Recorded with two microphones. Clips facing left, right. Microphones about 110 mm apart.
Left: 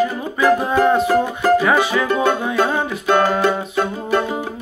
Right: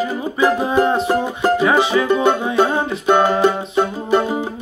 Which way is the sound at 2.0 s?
20° right (ahead or behind).